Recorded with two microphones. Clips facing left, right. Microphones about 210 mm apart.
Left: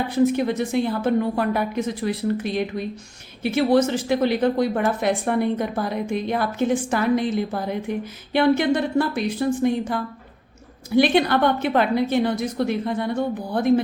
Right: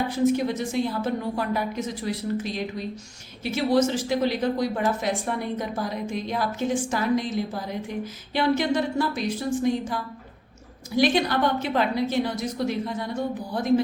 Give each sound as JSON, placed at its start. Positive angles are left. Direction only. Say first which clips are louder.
{"t": 0.3, "sound": "speech", "louder": "left 3 dB", "side_deg": 60}